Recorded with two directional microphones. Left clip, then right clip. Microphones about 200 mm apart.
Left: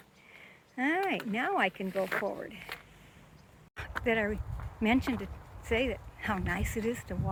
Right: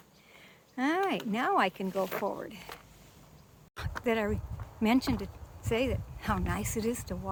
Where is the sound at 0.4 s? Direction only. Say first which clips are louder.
Even; 15° right (ahead or behind).